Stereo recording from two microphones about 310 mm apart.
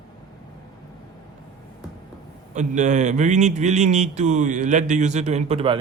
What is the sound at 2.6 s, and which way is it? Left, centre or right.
Speech, right.